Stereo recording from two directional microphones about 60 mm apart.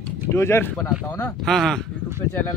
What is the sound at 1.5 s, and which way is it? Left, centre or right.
Speech, centre.